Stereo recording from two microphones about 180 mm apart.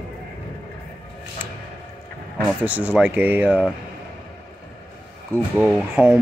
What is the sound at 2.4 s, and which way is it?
Speech, 10° right (ahead or behind).